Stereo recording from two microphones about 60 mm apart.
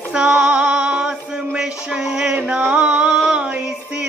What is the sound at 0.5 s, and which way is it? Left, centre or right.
Music, centre.